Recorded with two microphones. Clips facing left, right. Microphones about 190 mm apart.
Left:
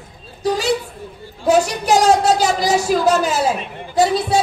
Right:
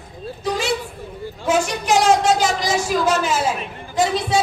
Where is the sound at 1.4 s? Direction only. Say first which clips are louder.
Left 4 dB; 40° left (ahead or behind).